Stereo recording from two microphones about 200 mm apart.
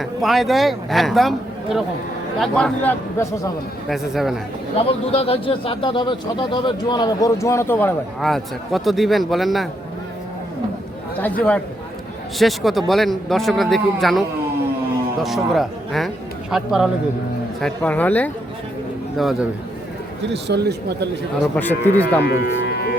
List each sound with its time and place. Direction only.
0.0 s a man's voice: centre (ahead or behind)
3.8 s a man's voice: centre (ahead or behind)
4.8 s speech: 30° left (ahead or behind); by 9.6 s centre (ahead or behind)
11.2 s a man's voice: 5° left (ahead or behind)
20.2 s speech: 60° right (ahead or behind)
21.5 s speech: 10° left (ahead or behind)
22.2 s music: 55° left (ahead or behind)